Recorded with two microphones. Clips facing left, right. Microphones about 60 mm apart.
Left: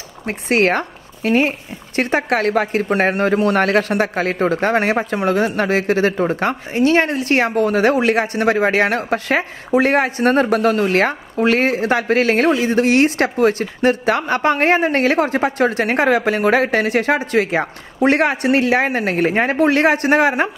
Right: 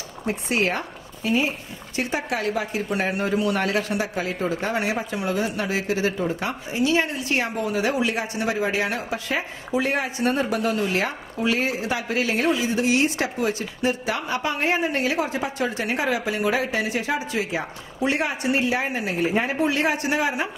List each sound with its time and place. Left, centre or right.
0.3 s speech: left